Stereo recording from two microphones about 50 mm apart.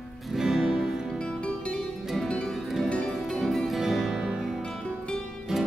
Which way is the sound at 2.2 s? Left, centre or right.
Centre.